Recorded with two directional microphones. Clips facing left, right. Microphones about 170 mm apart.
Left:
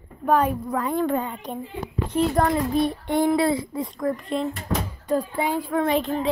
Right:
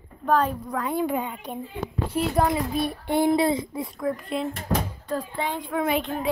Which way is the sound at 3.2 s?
25° right (ahead or behind).